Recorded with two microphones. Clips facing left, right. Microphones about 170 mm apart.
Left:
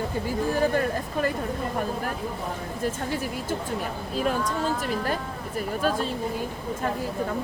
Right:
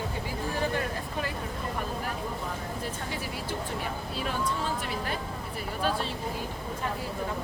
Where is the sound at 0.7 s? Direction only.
45° left (ahead or behind).